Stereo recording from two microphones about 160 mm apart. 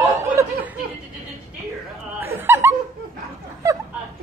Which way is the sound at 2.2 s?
15° right (ahead or behind).